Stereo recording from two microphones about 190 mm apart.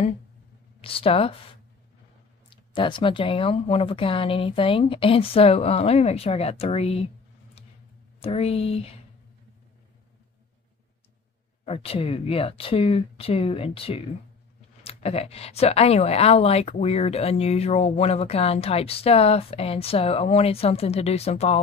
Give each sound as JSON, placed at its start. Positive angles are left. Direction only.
{"t": 0.7, "sound": "a woman's voice", "side_deg": 30}
{"t": 8.2, "sound": "a woman's voice", "side_deg": 30}
{"t": 11.6, "sound": "a woman's voice", "side_deg": 30}